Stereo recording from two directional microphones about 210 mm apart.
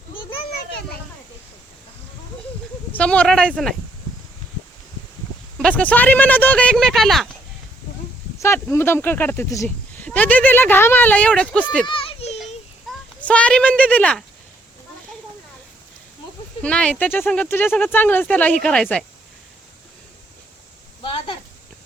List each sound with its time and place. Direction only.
2.9 s speech: 5° left (ahead or behind)
5.5 s speech: 5° left (ahead or behind)
8.4 s speech: 10° left (ahead or behind)
11.9 s children playing: 25° left (ahead or behind)
12.9 s a sound: 5° left (ahead or behind)
16.6 s speech: 5° left (ahead or behind)